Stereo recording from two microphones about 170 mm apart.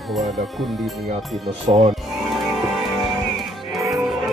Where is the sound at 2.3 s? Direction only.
Centre (ahead or behind).